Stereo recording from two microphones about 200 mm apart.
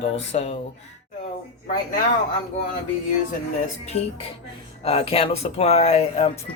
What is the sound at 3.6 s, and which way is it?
Speech, 30° left (ahead or behind).